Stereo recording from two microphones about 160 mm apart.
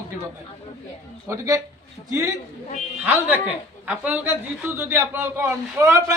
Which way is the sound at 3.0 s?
10° right (ahead or behind).